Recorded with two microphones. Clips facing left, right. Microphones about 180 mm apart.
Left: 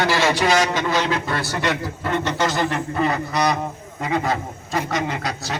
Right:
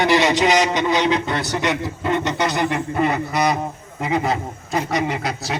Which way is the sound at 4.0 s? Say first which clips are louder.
Right 1 dB; 20° right (ahead or behind).